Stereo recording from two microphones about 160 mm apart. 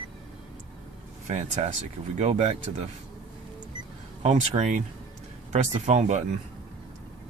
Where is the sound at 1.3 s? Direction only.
45° right (ahead or behind).